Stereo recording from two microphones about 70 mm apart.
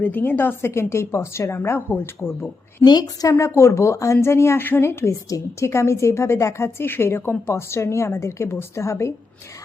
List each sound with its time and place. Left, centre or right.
0.0 s a woman's voice: left
2.8 s a woman's voice: left
3.2 s a woman's voice: left